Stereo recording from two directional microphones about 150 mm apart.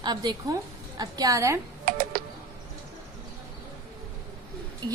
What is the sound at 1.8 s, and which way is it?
Music, 65° right (ahead or behind).